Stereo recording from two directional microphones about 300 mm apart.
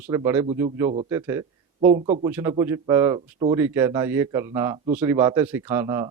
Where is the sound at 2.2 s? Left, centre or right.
Centre.